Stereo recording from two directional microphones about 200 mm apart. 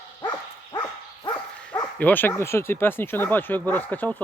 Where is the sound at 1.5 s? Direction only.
5° left (ahead or behind).